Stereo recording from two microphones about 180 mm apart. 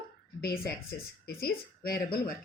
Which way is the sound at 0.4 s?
60° left (ahead or behind).